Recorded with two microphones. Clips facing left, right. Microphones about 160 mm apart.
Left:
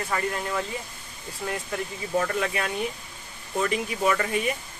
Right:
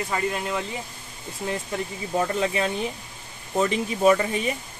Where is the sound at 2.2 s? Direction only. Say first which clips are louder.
Right 2 dB; 25° right (ahead or behind).